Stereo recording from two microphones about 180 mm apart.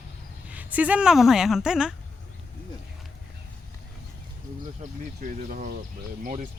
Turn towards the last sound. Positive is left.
turn(degrees=-50)  # may be behind; listen again after turning